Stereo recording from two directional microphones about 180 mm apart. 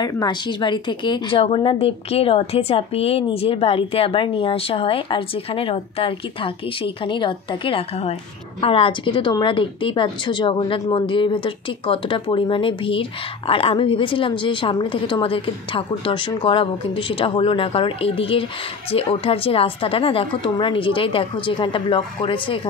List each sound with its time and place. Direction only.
0.0 s a woman's voice: 20° left (ahead or behind)